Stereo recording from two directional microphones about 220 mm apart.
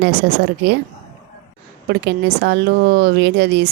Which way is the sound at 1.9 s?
50° right (ahead or behind).